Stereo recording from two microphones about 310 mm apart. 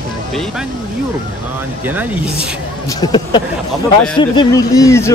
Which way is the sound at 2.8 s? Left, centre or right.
Centre.